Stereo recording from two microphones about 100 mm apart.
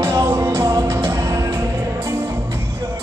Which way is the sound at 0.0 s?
30° right (ahead or behind).